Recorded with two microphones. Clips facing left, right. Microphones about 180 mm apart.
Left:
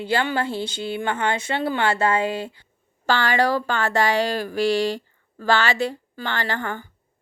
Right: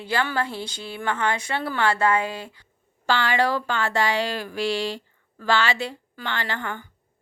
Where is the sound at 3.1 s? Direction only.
45° left (ahead or behind).